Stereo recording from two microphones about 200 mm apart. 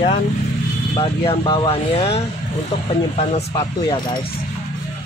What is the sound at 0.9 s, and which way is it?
Speech, 25° left (ahead or behind).